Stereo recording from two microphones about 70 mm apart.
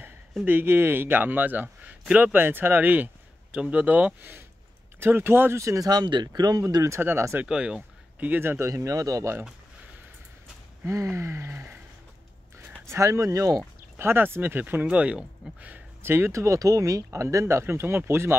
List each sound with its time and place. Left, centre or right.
0.5 s speech: right
5.9 s speech: right
7.0 s speech: right
7.4 s speech: centre
8.2 s speech: right
8.6 s speech: right
10.9 s speech: right
13.9 s speech: right; by 15.2 s centre
16.0 s speech: right